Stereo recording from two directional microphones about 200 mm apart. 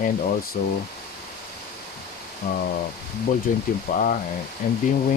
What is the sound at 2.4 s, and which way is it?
Speech, 35° left (ahead or behind).